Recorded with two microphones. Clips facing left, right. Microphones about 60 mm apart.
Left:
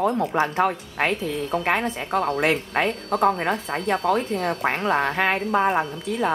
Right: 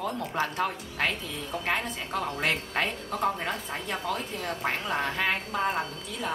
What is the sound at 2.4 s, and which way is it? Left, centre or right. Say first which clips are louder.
Speech: left 7 dB; centre.